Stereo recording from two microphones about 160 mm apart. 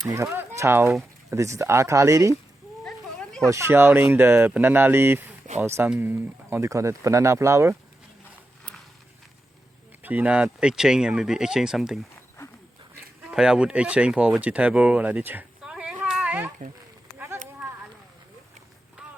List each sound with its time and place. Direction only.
0.1 s speech: 15° right (ahead or behind)
2.8 s a sound: 5° left (ahead or behind)
3.4 s speech: 20° right (ahead or behind)
10.0 s speech: 10° right (ahead or behind)
13.3 s speech: 5° right (ahead or behind)
17.2 s a sound: 15° right (ahead or behind)